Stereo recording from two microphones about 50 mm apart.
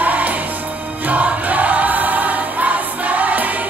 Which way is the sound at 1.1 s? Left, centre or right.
Right.